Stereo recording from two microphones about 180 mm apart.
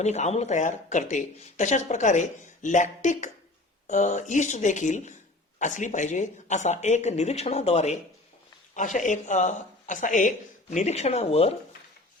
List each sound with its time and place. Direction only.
0.0 s speech: 40° left (ahead or behind)